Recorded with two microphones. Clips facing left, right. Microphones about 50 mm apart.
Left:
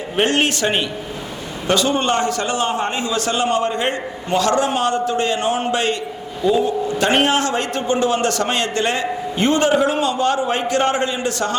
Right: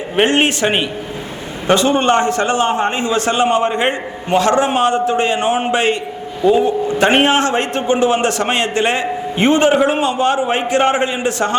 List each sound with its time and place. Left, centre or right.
0.2 s a man's voice: right